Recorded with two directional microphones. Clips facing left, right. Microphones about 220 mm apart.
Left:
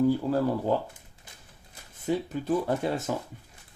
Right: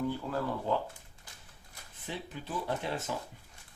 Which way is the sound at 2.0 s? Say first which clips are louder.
Left 13 dB; 45° left (ahead or behind).